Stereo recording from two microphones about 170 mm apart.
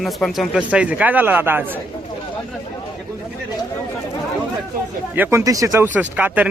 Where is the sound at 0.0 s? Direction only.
Centre (ahead or behind).